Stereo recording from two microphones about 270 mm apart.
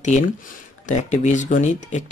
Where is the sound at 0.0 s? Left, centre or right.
Left.